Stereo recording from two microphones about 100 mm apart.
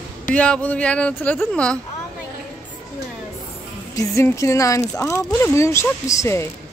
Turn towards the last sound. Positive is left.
turn(degrees=30)  # may be behind; listen again after turning